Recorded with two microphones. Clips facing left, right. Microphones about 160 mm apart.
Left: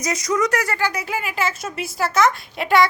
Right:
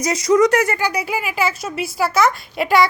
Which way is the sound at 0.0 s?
30° right (ahead or behind).